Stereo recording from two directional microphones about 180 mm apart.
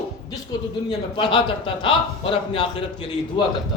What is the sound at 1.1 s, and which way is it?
Speech, 25° left (ahead or behind).